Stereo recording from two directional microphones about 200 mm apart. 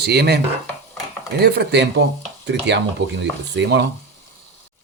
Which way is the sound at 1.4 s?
55° right (ahead or behind).